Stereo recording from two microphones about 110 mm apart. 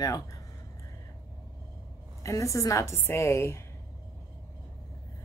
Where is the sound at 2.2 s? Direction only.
30° left (ahead or behind).